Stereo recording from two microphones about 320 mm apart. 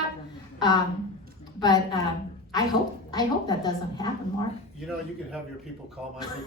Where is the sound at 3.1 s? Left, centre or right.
Centre.